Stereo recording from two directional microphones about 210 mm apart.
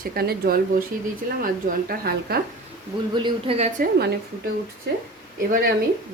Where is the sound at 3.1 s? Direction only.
25° right (ahead or behind).